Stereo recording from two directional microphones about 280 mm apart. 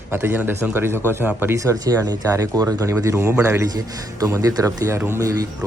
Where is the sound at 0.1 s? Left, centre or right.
Centre.